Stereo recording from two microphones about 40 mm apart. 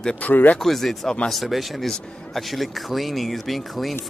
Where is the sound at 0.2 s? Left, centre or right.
Left.